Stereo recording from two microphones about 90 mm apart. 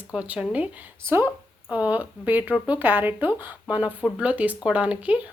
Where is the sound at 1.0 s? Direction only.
30° right (ahead or behind).